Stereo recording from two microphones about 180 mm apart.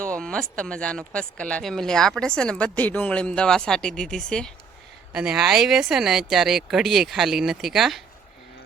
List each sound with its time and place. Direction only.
0.2 s speech: 5° left (ahead or behind)